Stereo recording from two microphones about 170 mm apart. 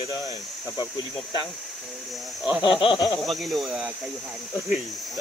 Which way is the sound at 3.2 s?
Centre (ahead or behind).